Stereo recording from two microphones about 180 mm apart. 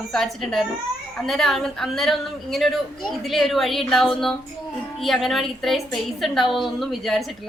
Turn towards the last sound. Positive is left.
turn(degrees=0)  # may be behind; listen again after turning